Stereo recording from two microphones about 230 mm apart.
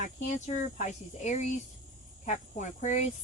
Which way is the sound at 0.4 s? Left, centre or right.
Left.